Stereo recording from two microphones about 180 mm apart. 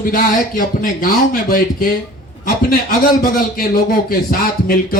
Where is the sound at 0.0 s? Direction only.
50° left (ahead or behind).